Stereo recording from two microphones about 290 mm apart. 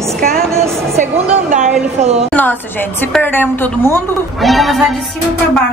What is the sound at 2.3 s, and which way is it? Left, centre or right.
A woman's voice, centre.